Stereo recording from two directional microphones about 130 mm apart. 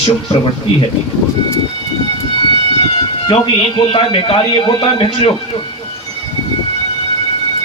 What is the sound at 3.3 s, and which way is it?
A man's voice, 40° left (ahead or behind).